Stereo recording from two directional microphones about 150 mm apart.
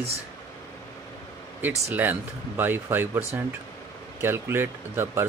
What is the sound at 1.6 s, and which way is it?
Speech, 10° right (ahead or behind).